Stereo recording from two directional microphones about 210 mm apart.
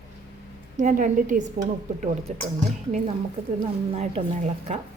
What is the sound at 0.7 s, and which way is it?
A woman's voice, 35° right (ahead or behind).